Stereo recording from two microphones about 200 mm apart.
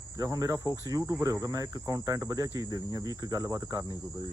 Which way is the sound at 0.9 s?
15° right (ahead or behind).